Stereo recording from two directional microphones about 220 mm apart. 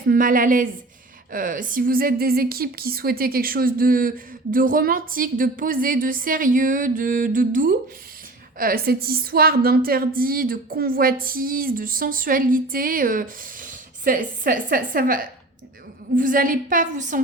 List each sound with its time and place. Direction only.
0.1 s a woman's voice: 40° right (ahead or behind)